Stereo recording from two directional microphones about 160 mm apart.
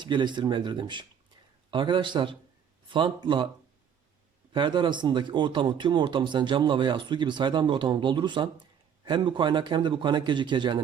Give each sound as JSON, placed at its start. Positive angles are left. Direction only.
{"t": 0.0, "sound": "speech", "side_deg": -30}
{"t": 4.5, "sound": "speech", "side_deg": -30}